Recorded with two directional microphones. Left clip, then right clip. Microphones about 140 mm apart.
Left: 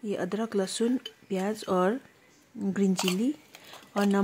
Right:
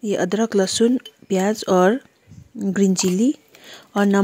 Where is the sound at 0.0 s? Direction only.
45° right (ahead or behind).